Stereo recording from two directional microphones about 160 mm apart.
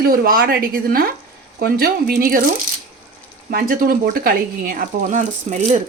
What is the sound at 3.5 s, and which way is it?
Speech, 60° right (ahead or behind).